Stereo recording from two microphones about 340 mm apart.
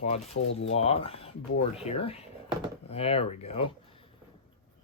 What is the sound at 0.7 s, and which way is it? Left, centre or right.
Speech, centre.